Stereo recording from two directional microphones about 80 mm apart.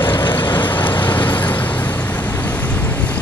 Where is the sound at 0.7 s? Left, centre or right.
Left.